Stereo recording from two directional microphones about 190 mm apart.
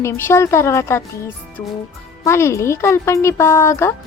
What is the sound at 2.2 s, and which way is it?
Speech, 15° left (ahead or behind).